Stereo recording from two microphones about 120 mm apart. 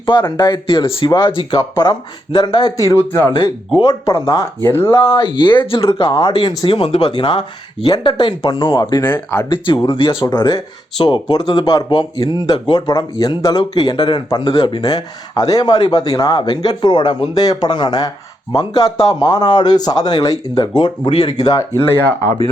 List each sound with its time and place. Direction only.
0.0 s speech: 40° left (ahead or behind)
9.0 s speech: 15° left (ahead or behind)
9.5 s speech: 45° left (ahead or behind)
21.8 s speech: 20° left (ahead or behind)